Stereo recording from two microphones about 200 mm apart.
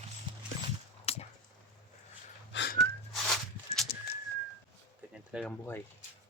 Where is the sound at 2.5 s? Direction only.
60° left (ahead or behind).